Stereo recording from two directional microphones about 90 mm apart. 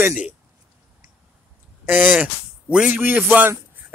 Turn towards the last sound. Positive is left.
turn(degrees=-25)  # may be behind; listen again after turning